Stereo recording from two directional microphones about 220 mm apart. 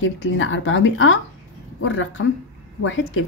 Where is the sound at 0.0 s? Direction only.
65° left (ahead or behind).